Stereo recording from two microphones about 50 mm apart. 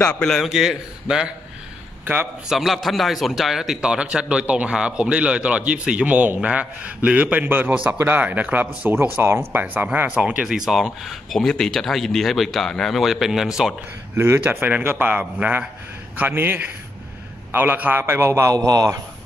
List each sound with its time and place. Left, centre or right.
0.2 s speech: centre
0.5 s a man's voice: centre
2.5 s a man's voice: centre; by 7.4 s right
7.4 s speech: right
8.1 s speech: right
8.9 s a man's voice: right
9.5 s speech: right
10.0 s a man's voice: right
10.5 s speech: centre
14.1 s a man's voice: right
14.8 s a man's voice: right